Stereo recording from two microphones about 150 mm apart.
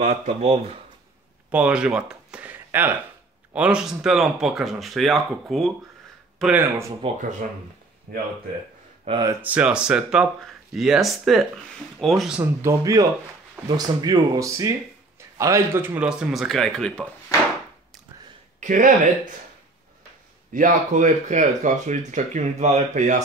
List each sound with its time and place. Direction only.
0.0 s speech: 50° right (ahead or behind)
1.5 s speech: 5° right (ahead or behind)
6.4 s speech: 15° right (ahead or behind)
7.2 s speech: 60° right (ahead or behind)
9.1 s speech: 40° right (ahead or behind)
9.4 s speech: 10° right (ahead or behind)
12.6 s speech: 20° right (ahead or behind); by 17.0 s 5° left (ahead or behind)
18.6 s speech: 60° right (ahead or behind)
20.5 s speech: 60° right (ahead or behind)